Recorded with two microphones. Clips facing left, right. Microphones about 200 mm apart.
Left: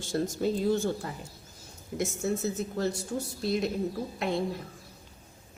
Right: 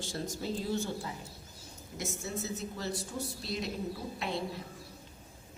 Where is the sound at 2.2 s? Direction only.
50° left (ahead or behind).